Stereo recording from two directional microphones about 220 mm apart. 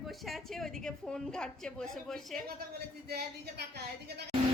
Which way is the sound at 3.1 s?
45° right (ahead or behind).